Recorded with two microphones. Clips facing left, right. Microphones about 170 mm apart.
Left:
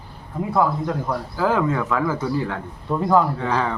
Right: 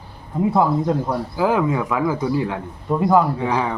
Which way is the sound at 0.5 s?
25° right (ahead or behind).